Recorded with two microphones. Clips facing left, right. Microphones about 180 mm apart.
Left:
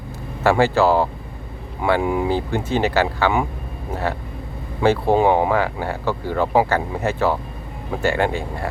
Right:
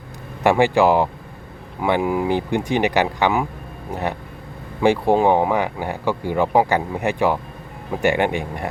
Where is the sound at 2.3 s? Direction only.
15° right (ahead or behind).